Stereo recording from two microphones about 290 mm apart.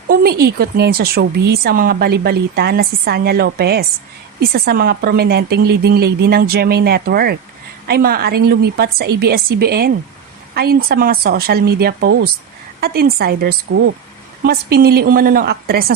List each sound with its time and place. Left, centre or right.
0.1 s speech: right